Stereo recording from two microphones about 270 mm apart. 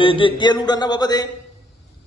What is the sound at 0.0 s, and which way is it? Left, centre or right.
A man's voice, centre.